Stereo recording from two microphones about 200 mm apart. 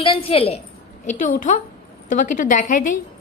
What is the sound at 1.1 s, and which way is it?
A woman's voice, 40° left (ahead or behind).